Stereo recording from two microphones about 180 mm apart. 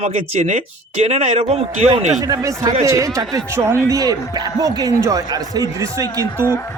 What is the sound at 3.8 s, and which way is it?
Speech, 20° right (ahead or behind).